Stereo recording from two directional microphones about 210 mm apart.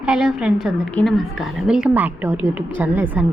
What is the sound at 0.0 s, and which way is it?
A woman's voice, 5° right (ahead or behind).